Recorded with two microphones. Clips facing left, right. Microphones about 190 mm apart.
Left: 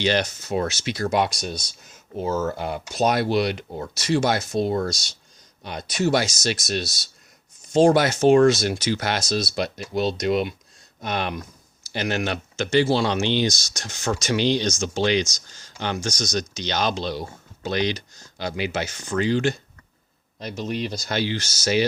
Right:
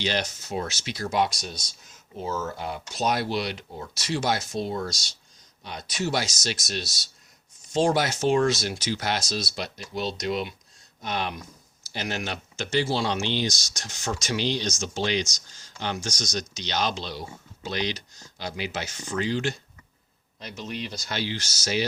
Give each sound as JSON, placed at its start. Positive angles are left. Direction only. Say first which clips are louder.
{"t": 0.0, "sound": "speech", "louder": "left 6 dB", "side_deg": 60}
{"t": 20.4, "sound": "speech", "louder": "left 7 dB", "side_deg": 40}